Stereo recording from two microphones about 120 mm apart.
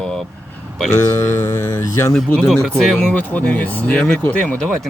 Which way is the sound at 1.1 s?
25° left (ahead or behind).